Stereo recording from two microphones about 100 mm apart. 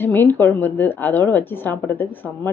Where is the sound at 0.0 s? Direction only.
20° left (ahead or behind).